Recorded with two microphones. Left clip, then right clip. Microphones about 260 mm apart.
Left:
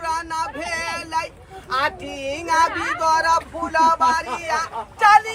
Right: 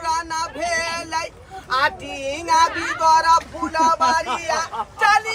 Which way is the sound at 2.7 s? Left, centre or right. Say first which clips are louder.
Even; left.